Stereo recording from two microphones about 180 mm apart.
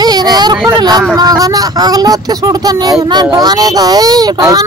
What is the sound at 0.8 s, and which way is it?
Speech, 20° right (ahead or behind).